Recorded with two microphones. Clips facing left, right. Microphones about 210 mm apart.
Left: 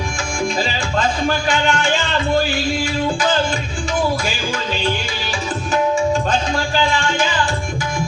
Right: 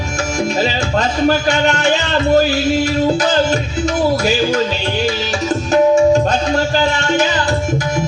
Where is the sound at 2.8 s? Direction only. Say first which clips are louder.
Right 5 dB; 40° right (ahead or behind).